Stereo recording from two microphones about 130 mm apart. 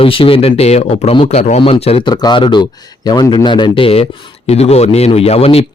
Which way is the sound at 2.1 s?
30° left (ahead or behind).